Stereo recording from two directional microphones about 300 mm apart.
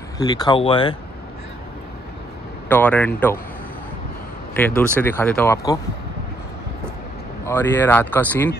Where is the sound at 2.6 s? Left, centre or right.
Centre.